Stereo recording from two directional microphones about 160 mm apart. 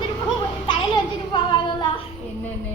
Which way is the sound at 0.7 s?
30° left (ahead or behind).